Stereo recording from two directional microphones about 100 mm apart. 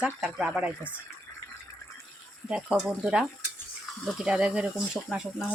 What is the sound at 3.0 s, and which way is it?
Speech, 10° right (ahead or behind).